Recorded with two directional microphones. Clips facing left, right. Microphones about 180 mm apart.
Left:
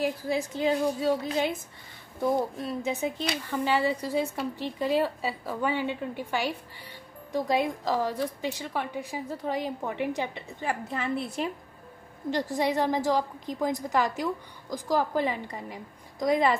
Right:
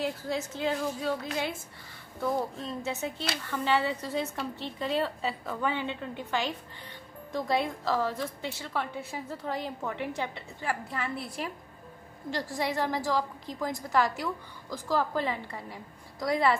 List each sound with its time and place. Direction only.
0.0 s a woman's voice: 10° left (ahead or behind)